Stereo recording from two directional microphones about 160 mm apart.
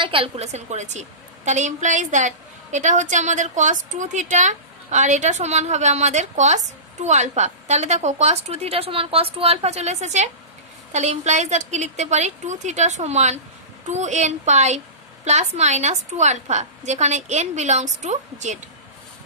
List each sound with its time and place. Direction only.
0.0 s a woman's voice: 35° right (ahead or behind)